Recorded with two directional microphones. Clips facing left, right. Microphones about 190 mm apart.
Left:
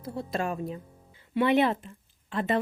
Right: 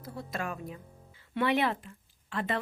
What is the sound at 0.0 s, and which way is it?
Speech, 25° left (ahead or behind).